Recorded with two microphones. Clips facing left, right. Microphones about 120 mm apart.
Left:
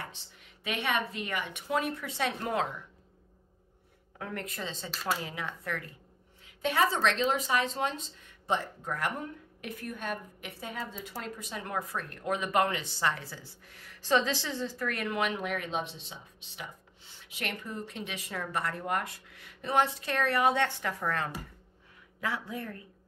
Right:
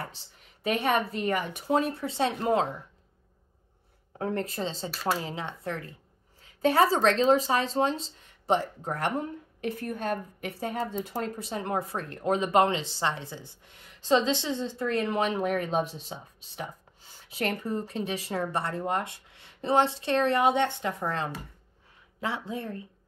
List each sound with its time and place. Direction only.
0.0 s speech: 40° right (ahead or behind)
4.2 s speech: 30° right (ahead or behind)
6.4 s speech: 40° right (ahead or behind)